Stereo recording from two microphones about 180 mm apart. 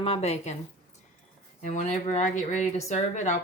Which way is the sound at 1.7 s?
40° left (ahead or behind).